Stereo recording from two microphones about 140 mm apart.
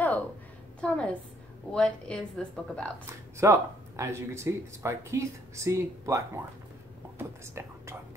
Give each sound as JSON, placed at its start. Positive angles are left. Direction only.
{"t": 0.7, "sound": "a woman's voice", "side_deg": 10}
{"t": 3.3, "sound": "speech", "side_deg": -20}